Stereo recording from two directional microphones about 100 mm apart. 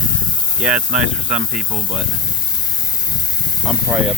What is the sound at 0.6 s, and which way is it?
Speech, 10° right (ahead or behind).